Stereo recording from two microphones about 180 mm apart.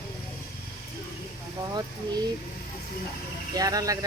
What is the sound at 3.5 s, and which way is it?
Speech, 20° right (ahead or behind).